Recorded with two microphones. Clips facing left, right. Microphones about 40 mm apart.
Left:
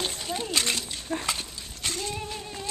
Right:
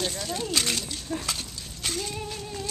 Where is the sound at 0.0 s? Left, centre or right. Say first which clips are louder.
Right 1 dB; centre.